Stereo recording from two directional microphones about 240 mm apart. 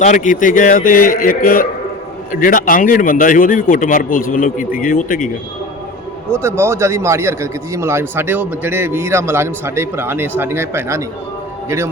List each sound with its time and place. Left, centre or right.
0.0 s a man's voice: left
6.3 s a man's voice: centre